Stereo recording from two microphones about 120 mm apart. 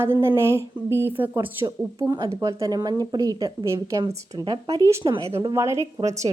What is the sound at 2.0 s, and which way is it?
A woman's voice, 30° right (ahead or behind).